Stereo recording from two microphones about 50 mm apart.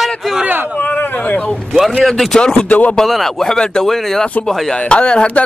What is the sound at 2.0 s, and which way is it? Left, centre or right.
Speech, centre.